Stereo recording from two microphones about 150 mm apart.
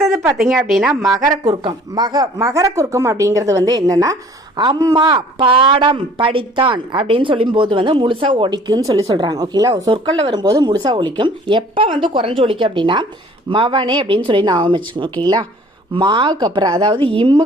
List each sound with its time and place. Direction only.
0.1 s a woman's voice: 15° right (ahead or behind)
0.5 s speech: centre (ahead or behind)
1.0 s a woman's voice: 25° right (ahead or behind)